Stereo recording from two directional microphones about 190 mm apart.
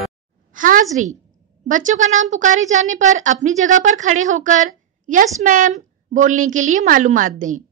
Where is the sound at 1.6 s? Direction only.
40° right (ahead or behind).